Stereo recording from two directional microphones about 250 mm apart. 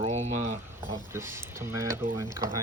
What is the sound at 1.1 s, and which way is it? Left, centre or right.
Speech, centre.